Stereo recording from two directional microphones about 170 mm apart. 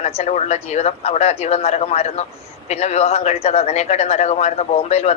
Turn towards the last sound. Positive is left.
turn(degrees=40)  # may be behind; listen again after turning